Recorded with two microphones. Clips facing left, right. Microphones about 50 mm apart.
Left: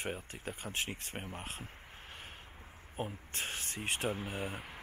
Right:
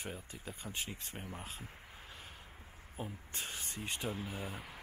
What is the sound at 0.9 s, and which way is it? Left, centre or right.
Speech, left.